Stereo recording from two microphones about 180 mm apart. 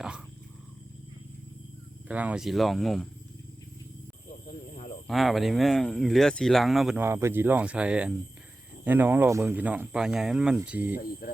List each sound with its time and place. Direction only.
2.0 s speech: 5° right (ahead or behind)
5.0 s speech: centre (ahead or behind)
10.9 s speech: 50° left (ahead or behind)